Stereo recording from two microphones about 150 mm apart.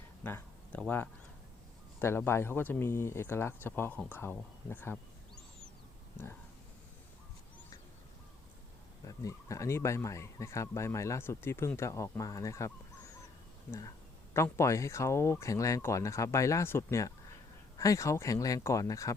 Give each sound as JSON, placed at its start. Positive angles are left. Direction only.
{"t": 0.2, "sound": "speech", "side_deg": 15}
{"t": 9.0, "sound": "speech", "side_deg": 20}